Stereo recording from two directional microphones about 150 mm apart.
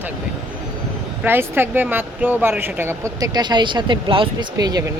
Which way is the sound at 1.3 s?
15° right (ahead or behind).